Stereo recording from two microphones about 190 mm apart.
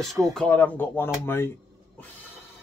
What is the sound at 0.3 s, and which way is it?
Speech, 5° left (ahead or behind).